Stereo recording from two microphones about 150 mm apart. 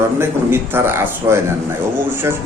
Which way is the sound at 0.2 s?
15° right (ahead or behind).